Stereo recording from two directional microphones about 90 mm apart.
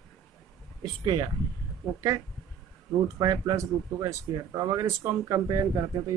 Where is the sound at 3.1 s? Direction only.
40° right (ahead or behind).